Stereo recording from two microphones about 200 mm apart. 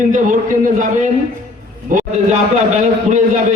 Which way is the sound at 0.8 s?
40° right (ahead or behind).